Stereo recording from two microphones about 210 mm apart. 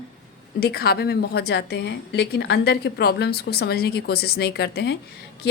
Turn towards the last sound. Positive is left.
turn(degrees=50)  # may be behind; listen again after turning